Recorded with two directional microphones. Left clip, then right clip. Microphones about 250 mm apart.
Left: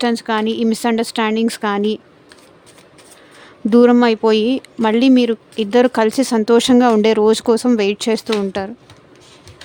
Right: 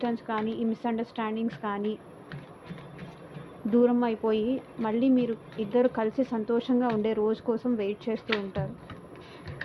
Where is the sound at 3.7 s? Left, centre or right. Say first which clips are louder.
Left 13 dB; left.